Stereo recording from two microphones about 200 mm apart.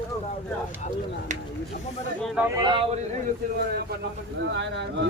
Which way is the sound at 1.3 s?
35° right (ahead or behind).